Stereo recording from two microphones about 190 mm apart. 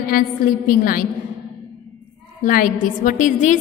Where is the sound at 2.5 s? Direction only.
45° left (ahead or behind).